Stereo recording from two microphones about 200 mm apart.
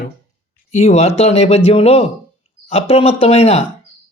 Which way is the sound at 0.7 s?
35° left (ahead or behind).